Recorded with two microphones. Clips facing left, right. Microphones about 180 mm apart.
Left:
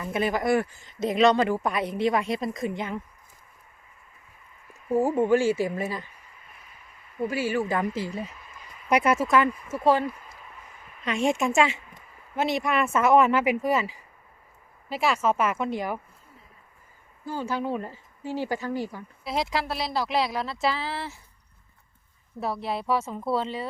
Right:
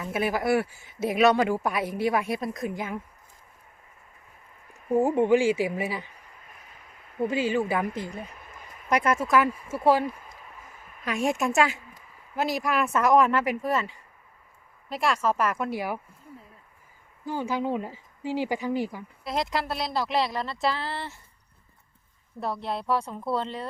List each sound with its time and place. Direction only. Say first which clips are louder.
0.0 s speech: left 1 dB; 5° right (ahead or behind)
4.7 s speech: right 1 dB; 15° right (ahead or behind)
7.2 s speech: right 1 dB; 20° right (ahead or behind)
7.8 s speech: left 2 dB; 5° left (ahead or behind); by 10.1 s 10° right (ahead or behind)
11.0 s speech: left 2 dB; centre (ahead or behind)
17.2 s speech: right 1 dB; 15° right (ahead or behind)
19.2 s speech: left 1 dB; centre (ahead or behind)
22.4 s speech: left 1 dB; centre (ahead or behind)